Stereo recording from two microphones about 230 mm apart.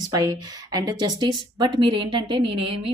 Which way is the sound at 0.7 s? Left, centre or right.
Centre.